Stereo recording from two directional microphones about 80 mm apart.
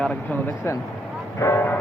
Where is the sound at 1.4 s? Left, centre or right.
Left.